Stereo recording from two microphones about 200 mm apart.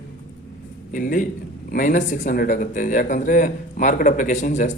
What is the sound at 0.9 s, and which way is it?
A man's voice, 40° left (ahead or behind).